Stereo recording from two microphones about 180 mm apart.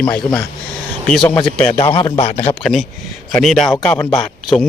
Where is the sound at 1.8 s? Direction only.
30° left (ahead or behind).